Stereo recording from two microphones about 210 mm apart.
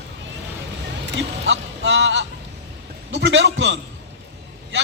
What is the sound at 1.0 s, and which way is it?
A man's voice, 60° right (ahead or behind).